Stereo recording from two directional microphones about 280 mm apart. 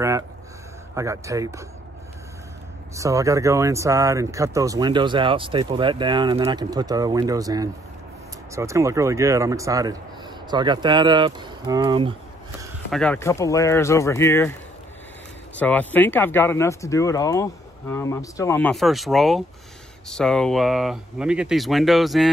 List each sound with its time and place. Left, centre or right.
0.9 s speech: centre
2.9 s speech: centre
12.9 s speech: centre